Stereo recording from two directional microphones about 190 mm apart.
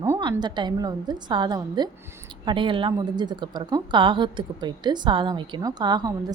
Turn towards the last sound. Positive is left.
turn(degrees=-20)  # may be behind; listen again after turning